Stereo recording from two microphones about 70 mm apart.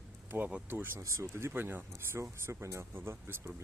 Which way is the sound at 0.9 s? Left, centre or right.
Right.